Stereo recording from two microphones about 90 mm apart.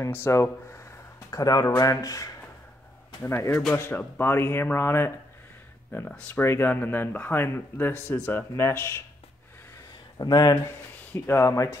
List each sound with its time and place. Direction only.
0.0 s speech: 30° left (ahead or behind)
1.3 s speech: 45° left (ahead or behind)
3.2 s speech: 30° left (ahead or behind)
6.0 s speech: 15° left (ahead or behind)
6.4 s speech: 25° left (ahead or behind)
10.1 s speech: 50° left (ahead or behind)
11.1 s speech: 25° left (ahead or behind)